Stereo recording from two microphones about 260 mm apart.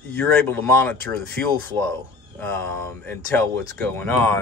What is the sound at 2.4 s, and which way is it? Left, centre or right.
Speech, centre.